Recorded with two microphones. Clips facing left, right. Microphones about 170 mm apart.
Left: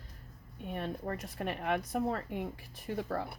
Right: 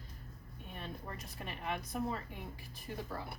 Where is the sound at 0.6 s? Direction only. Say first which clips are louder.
Left 9 dB; 65° left (ahead or behind).